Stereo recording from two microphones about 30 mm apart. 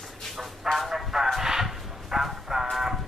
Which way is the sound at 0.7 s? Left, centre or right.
Centre.